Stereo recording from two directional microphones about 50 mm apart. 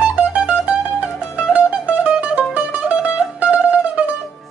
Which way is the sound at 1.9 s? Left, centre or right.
Right.